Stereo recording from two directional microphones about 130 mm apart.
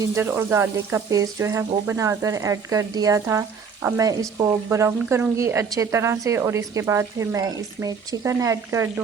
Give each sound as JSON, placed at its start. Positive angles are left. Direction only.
{"t": 0.0, "sound": "speech", "side_deg": -15}